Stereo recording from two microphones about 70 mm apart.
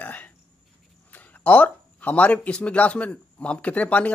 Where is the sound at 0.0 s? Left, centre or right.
Left.